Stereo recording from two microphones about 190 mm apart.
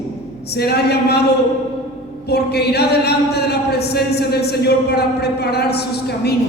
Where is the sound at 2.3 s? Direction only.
60° left (ahead or behind).